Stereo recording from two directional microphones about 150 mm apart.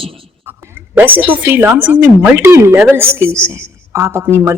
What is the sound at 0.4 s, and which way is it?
A woman's voice, 15° right (ahead or behind).